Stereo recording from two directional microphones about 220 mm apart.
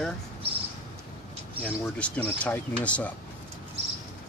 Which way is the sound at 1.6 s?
5° left (ahead or behind).